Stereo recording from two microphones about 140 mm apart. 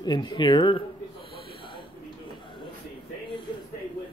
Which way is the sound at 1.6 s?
35° left (ahead or behind).